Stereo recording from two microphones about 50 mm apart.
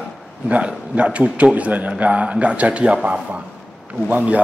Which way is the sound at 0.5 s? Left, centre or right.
Right.